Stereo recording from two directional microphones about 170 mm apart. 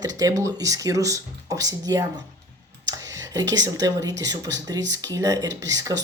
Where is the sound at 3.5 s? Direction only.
20° right (ahead or behind).